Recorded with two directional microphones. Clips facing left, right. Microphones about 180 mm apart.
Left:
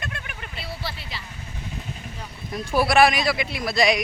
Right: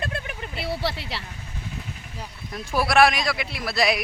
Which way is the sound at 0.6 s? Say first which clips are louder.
Right 7 dB; 75° right (ahead or behind).